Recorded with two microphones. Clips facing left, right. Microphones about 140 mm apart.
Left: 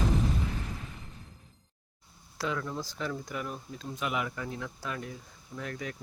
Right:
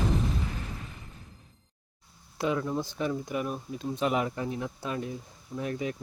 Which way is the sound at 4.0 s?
35° right (ahead or behind).